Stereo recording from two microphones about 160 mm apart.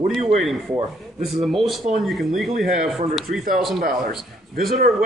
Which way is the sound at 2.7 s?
50° right (ahead or behind).